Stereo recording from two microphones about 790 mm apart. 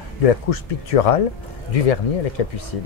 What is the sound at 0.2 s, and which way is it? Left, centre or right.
Speech, left.